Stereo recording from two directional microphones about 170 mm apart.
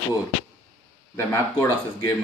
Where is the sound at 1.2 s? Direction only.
15° left (ahead or behind).